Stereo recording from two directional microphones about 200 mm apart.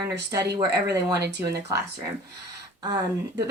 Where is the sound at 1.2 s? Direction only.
55° right (ahead or behind).